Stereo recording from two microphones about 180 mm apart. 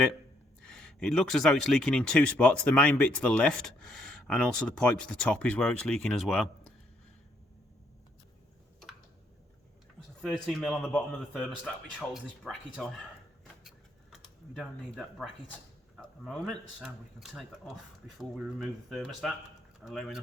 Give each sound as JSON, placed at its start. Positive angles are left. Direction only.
{"t": 0.6, "sound": "speech", "side_deg": 5}
{"t": 10.2, "sound": "speech", "side_deg": 0}
{"t": 13.7, "sound": "a sound", "side_deg": 0}
{"t": 16.0, "sound": "speech", "side_deg": 5}